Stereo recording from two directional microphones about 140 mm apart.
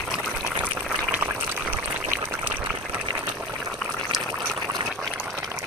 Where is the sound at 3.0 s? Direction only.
35° right (ahead or behind).